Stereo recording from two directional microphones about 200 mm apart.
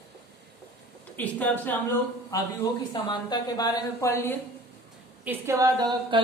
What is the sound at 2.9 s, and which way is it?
A woman's voice, 20° left (ahead or behind).